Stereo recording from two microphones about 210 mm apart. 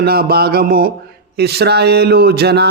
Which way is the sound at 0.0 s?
45° right (ahead or behind).